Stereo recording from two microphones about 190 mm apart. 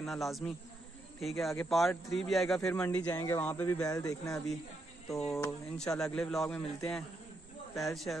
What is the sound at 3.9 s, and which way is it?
Speech, 20° left (ahead or behind).